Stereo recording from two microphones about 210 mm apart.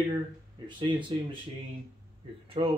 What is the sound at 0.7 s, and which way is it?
Speech, 25° right (ahead or behind).